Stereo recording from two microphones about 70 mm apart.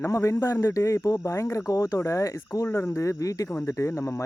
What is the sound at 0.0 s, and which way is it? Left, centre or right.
Speech, left.